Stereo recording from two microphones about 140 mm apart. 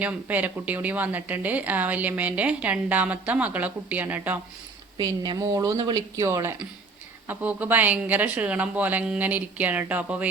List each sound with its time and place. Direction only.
0.0 s a woman's voice: 10° right (ahead or behind)
4.9 s a woman's voice: 30° right (ahead or behind); by 10.2 s 10° right (ahead or behind)